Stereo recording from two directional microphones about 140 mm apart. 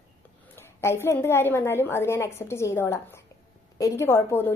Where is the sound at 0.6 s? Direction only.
20° left (ahead or behind).